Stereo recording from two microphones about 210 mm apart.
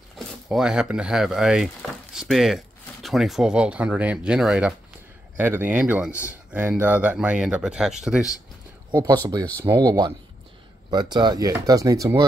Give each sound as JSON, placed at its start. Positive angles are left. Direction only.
{"t": 0.5, "sound": "speech", "side_deg": -5}
{"t": 8.9, "sound": "speech", "side_deg": -20}
{"t": 10.9, "sound": "speech", "side_deg": -20}